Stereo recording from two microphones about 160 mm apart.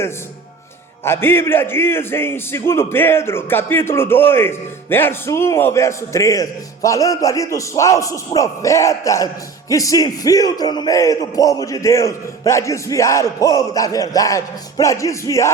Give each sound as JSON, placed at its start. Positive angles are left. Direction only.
{"t": 1.0, "sound": "a man's voice", "side_deg": 15}